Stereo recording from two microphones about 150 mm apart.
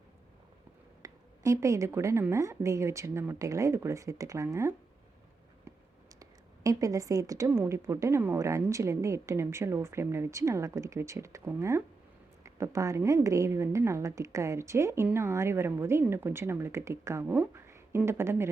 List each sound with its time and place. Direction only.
1.0 s a woman's voice: 20° right (ahead or behind)
6.1 s a woman's voice: 20° right (ahead or behind)